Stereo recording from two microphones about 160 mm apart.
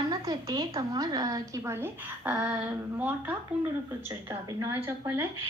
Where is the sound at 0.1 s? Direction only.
25° right (ahead or behind).